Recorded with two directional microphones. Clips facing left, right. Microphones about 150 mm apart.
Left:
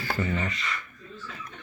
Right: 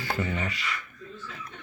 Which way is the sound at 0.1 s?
15° right (ahead or behind).